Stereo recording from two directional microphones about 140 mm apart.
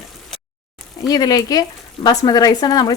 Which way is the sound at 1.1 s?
30° left (ahead or behind).